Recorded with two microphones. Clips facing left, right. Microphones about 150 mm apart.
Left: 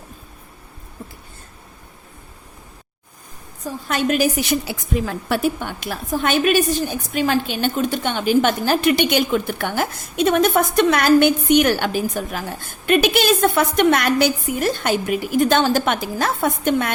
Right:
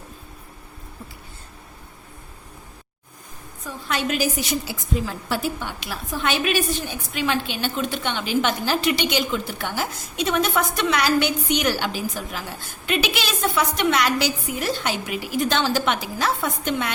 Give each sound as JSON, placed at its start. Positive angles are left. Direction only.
{"t": 3.6, "sound": "a woman's voice", "side_deg": 45}